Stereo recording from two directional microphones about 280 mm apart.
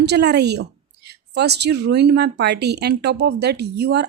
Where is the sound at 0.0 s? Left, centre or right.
Right.